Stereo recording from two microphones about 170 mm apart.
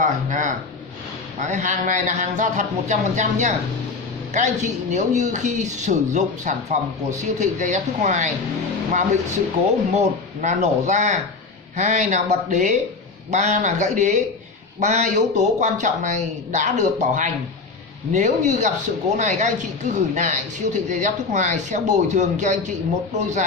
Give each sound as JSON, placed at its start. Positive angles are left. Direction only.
{"t": 0.0, "sound": "a woman's voice", "side_deg": -50}
{"t": 9.9, "sound": "a woman's voice", "side_deg": -45}